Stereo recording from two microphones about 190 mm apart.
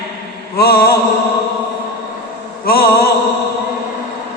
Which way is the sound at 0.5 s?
55° left (ahead or behind).